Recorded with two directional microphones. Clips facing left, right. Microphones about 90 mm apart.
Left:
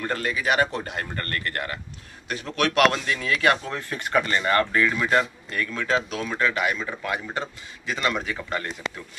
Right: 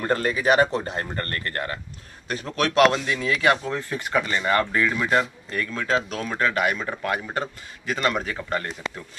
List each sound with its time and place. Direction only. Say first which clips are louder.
0.0 s speech: right 4 dB; 35° right (ahead or behind); by 5.2 s 10° right (ahead or behind)
5.5 s speech: right 1 dB; 30° right (ahead or behind)